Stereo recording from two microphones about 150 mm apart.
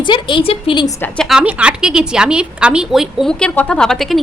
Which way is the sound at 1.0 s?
5° left (ahead or behind).